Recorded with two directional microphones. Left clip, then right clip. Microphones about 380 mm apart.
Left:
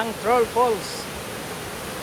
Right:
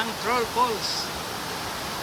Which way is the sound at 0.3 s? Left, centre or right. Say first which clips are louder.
Left 6 dB; centre.